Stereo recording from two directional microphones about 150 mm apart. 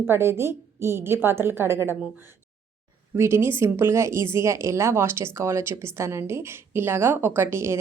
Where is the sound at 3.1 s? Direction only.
20° right (ahead or behind).